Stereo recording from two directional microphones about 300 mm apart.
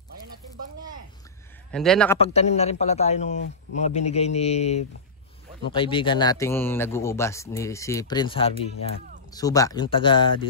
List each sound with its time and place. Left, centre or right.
1.7 s speech: centre
2.2 s a man's voice: left